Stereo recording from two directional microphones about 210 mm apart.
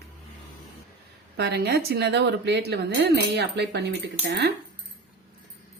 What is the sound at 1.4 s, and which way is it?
Speech, 50° right (ahead or behind).